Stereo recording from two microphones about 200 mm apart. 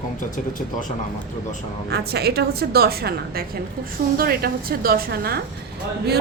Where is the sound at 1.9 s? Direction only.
50° right (ahead or behind).